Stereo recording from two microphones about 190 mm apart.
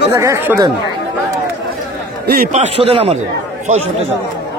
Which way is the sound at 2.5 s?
35° right (ahead or behind).